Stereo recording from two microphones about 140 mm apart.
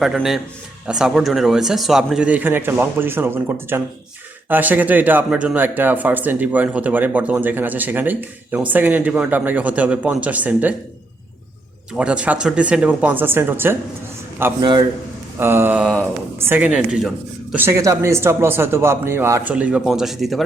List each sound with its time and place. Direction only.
0.0 s speech: centre (ahead or behind)
11.9 s speech: 10° right (ahead or behind)
14.6 s a man's voice: 30° right (ahead or behind)
15.4 s speech: 15° right (ahead or behind)
15.8 s speech: 5° left (ahead or behind)
16.5 s speech: 10° right (ahead or behind)